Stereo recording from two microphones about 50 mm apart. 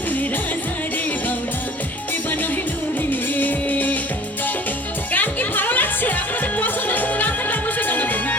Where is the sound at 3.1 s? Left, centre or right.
Left.